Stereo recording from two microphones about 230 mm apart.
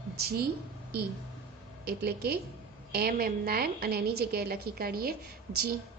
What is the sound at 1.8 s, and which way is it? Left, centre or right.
A woman's voice, right.